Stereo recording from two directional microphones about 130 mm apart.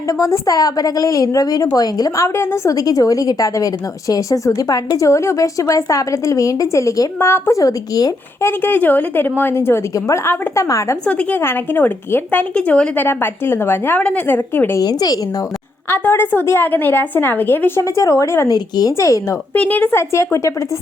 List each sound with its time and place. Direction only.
0.1 s a woman's voice: 25° left (ahead or behind)
11.0 s a woman's voice: 10° left (ahead or behind)
14.8 s a woman's voice: 30° left (ahead or behind)
15.9 s a woman's voice: 15° left (ahead or behind)
19.5 s a woman's voice: 10° left (ahead or behind)